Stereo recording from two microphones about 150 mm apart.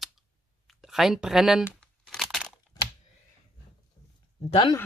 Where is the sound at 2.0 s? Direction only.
Centre (ahead or behind).